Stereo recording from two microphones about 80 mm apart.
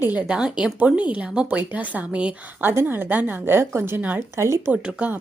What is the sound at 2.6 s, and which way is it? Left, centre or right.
A woman's voice, right.